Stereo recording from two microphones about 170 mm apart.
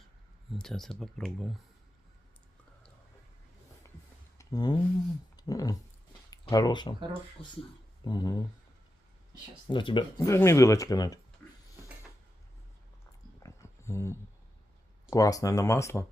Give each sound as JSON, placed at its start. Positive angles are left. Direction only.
{"t": 0.5, "sound": "speech", "side_deg": 0}
{"t": 4.4, "sound": "a sound", "side_deg": 25}
{"t": 5.4, "sound": "speech", "side_deg": 20}
{"t": 9.6, "sound": "speech", "side_deg": 30}
{"t": 10.2, "sound": "speech", "side_deg": 15}
{"t": 13.4, "sound": "a sound", "side_deg": 15}
{"t": 15.1, "sound": "speech", "side_deg": 20}